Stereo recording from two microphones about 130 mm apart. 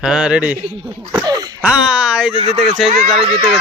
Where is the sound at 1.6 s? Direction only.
5° right (ahead or behind).